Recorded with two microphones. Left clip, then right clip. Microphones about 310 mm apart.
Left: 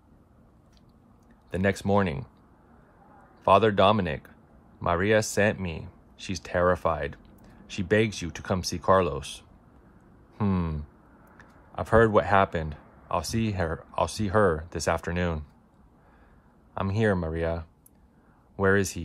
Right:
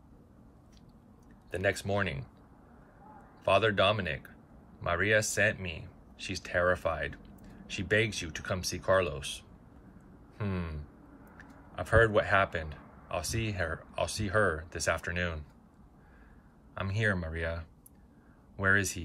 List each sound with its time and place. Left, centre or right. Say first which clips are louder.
1.8 s speech: left 7 dB; centre
3.4 s speech: left 6 dB; centre
10.3 s speech: left 8 dB; centre
11.3 s a sound: left 5 dB; centre
13.1 s speech: left 6 dB; centre
16.7 s speech: left 5 dB; centre